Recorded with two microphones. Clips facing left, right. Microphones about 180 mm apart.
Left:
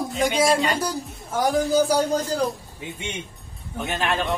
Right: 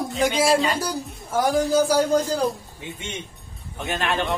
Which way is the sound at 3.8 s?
Centre (ahead or behind).